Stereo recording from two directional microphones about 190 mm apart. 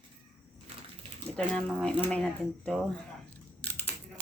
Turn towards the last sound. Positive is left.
turn(degrees=5)  # may be behind; listen again after turning